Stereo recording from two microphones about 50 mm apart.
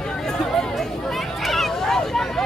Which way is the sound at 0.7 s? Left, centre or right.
Centre.